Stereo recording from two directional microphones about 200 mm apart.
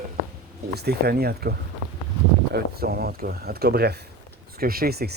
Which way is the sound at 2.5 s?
50° right (ahead or behind).